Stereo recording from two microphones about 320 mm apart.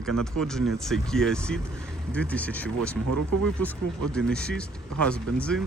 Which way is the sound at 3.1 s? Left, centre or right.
Right.